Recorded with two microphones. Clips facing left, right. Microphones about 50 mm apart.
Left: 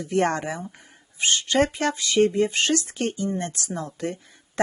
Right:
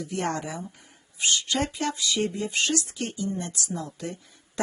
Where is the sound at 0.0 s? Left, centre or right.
Left.